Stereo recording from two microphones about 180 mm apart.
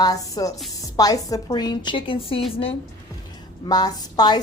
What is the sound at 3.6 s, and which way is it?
Speech, 20° left (ahead or behind).